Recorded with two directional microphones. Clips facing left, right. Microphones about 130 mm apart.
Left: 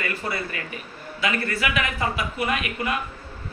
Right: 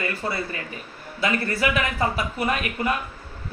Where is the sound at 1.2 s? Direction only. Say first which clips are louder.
Right 2 dB; 35° right (ahead or behind).